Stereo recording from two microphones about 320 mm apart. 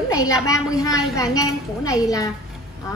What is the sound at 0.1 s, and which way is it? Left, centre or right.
A woman's voice, centre.